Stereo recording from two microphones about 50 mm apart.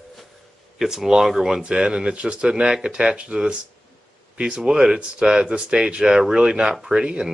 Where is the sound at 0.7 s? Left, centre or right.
Centre.